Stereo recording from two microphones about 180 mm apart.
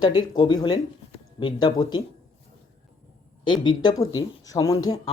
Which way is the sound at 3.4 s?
25° left (ahead or behind).